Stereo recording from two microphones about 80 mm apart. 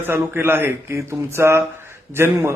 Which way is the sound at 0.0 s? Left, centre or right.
Right.